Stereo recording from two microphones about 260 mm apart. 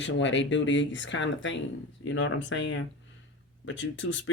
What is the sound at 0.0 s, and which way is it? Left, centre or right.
Speech, left.